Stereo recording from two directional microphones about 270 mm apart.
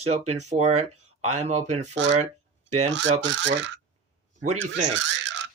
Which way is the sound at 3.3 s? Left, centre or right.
Right.